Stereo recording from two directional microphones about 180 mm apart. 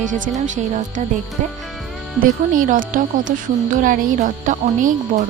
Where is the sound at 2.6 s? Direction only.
50° right (ahead or behind).